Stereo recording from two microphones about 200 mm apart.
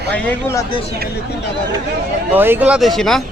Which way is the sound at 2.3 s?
10° right (ahead or behind).